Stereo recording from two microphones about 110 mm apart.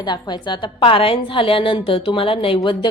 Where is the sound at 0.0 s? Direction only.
40° left (ahead or behind).